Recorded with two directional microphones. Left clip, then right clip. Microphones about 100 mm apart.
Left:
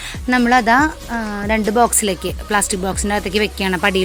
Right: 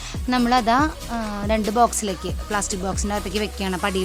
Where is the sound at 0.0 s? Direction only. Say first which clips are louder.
Left 6 dB; 15° left (ahead or behind).